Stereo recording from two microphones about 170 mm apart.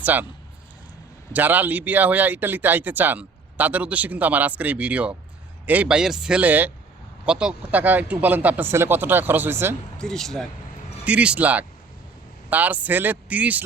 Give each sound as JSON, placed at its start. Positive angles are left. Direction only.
{"t": 0.0, "sound": "speech", "side_deg": -10}
{"t": 1.3, "sound": "speech", "side_deg": -10}
{"t": 10.0, "sound": "speech", "side_deg": 5}